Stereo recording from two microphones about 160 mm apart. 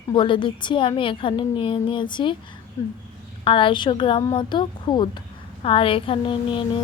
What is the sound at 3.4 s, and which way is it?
A woman's voice, 35° left (ahead or behind).